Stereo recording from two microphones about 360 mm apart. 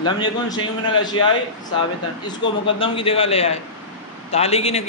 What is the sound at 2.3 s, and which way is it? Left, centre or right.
A man's voice, centre.